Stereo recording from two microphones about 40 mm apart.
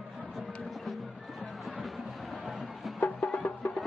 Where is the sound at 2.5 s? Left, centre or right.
Centre.